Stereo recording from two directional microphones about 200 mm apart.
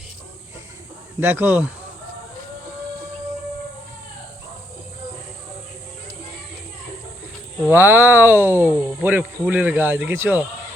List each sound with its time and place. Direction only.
1.2 s speech: 10° right (ahead or behind)
7.7 s speech: 10° right (ahead or behind)